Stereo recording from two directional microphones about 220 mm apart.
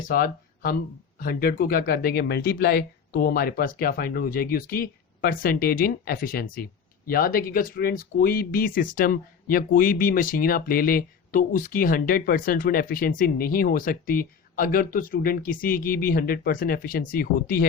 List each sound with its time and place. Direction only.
0.1 s speech: 40° left (ahead or behind)